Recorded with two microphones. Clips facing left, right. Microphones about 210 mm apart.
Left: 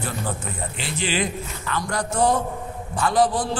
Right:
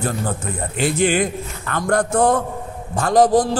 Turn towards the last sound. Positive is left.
turn(degrees=-45)  # may be behind; listen again after turning